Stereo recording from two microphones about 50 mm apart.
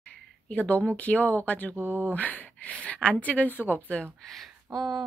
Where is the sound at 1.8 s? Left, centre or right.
Right.